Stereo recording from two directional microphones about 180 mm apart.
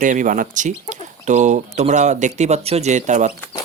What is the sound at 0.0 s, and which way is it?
Speech, 45° right (ahead or behind).